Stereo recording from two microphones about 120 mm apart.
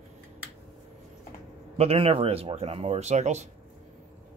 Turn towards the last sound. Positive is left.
turn(degrees=-70)  # may be behind; listen again after turning